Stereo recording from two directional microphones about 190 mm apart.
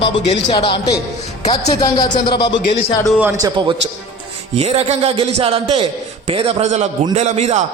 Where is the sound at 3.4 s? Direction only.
25° right (ahead or behind).